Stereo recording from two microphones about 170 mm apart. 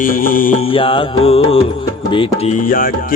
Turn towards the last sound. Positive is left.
turn(degrees=55)  # may be behind; listen again after turning